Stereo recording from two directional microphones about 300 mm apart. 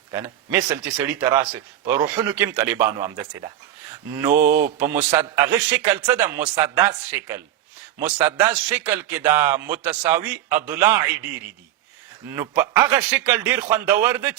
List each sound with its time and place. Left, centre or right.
0.1 s a man's voice: centre
4.3 s mantra: right
4.8 s a man's voice: centre
12.4 s a man's voice: centre